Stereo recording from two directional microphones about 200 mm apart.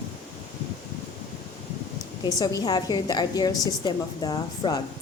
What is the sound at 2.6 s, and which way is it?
A woman's voice, 20° left (ahead or behind).